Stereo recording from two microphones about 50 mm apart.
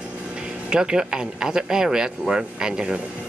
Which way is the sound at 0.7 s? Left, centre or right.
Centre.